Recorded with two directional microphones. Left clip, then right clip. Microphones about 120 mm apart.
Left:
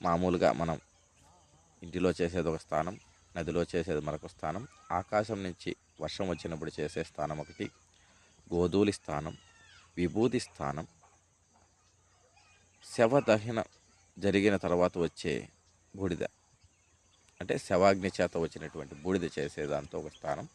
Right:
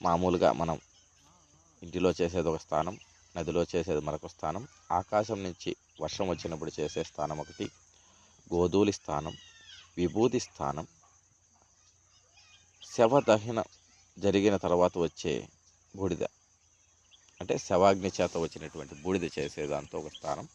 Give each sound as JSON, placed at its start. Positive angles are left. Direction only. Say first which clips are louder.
{"t": 0.0, "sound": "speech", "louder": "right 2 dB", "side_deg": 15}
{"t": 9.3, "sound": "cat", "louder": "right 6 dB", "side_deg": 35}
{"t": 9.9, "sound": "speech", "louder": "right 2 dB", "side_deg": 25}
{"t": 12.8, "sound": "speech", "louder": "right 2 dB", "side_deg": 20}
{"t": 17.3, "sound": "speech", "louder": "right 2 dB", "side_deg": 20}
{"t": 18.2, "sound": "speech", "louder": "right 1 dB", "side_deg": 0}